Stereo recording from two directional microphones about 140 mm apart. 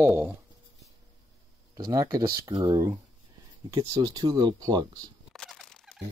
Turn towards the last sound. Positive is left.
turn(degrees=5)  # may be behind; listen again after turning